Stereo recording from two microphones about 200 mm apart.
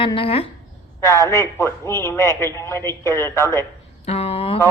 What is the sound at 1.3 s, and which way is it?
A man's voice, 15° left (ahead or behind).